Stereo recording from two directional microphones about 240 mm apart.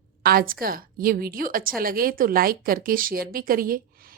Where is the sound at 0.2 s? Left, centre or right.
Right.